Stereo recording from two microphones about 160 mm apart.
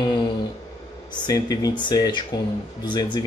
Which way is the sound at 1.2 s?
25° left (ahead or behind).